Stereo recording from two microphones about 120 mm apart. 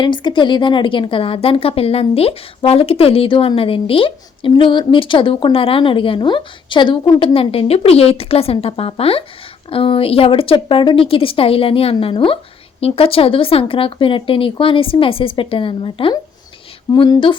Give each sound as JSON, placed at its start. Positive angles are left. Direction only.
{"t": 0.0, "sound": "a woman's voice", "side_deg": 40}